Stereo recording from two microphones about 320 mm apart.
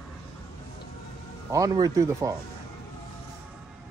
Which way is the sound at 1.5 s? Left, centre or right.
Centre.